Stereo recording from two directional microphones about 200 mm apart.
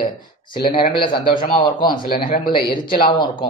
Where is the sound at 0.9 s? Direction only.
25° left (ahead or behind).